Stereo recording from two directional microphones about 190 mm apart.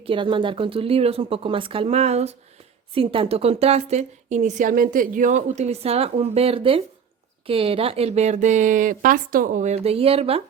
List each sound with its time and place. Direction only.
0.0 s a woman's voice: 25° right (ahead or behind)